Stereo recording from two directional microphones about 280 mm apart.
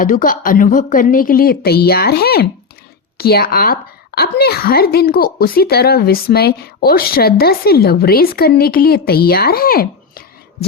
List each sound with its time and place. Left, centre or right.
0.0 s a woman's voice: left